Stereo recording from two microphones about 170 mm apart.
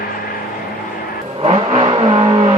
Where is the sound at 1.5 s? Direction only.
35° right (ahead or behind).